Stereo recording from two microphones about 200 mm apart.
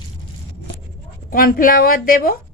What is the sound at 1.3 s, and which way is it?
Speech, 45° left (ahead or behind).